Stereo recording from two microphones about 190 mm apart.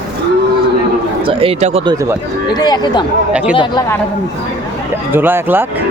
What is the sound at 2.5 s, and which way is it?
Speech, 20° left (ahead or behind).